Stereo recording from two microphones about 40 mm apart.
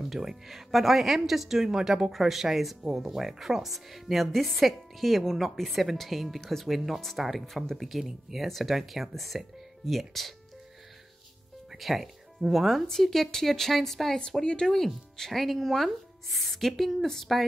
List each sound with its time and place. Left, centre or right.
0.1 s speech: centre
2.1 s speech: centre
6.7 s speech: centre
11.7 s speech: centre
12.8 s speech: centre
14.4 s speech: left
15.1 s speech: centre